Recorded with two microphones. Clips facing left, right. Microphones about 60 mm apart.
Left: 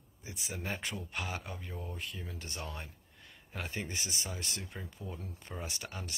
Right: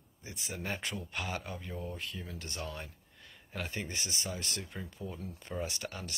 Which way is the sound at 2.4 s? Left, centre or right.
Centre.